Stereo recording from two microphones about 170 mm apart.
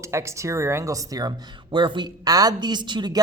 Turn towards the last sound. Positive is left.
turn(degrees=-25)  # may be behind; listen again after turning